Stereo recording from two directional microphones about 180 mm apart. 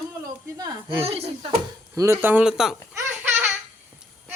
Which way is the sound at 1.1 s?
35° right (ahead or behind).